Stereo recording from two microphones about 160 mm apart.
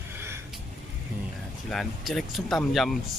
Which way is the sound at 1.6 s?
Centre (ahead or behind).